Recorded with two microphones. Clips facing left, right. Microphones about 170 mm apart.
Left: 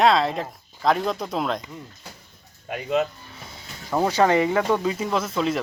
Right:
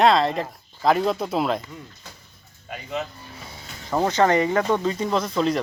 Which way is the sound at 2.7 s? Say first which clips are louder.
Left 7 dB; 60° left (ahead or behind).